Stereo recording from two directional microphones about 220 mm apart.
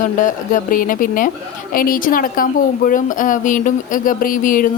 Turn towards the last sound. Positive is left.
turn(degrees=40)  # may be behind; listen again after turning